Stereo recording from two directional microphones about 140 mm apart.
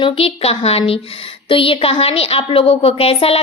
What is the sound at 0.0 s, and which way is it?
A woman's voice, 40° left (ahead or behind).